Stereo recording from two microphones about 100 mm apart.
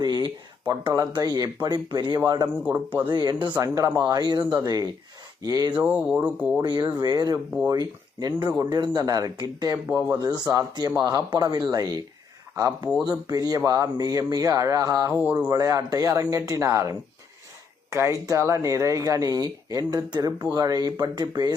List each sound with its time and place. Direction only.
0.0 s speech: 45° right (ahead or behind)
3.6 s speech: 35° right (ahead or behind)
4.1 s speech: 45° right (ahead or behind)
5.7 s speech: 15° right (ahead or behind)
6.6 s speech: 45° right (ahead or behind)
15.2 s speech: 15° right (ahead or behind)
15.4 s speech: 40° right (ahead or behind)
17.9 s speech: 30° right (ahead or behind)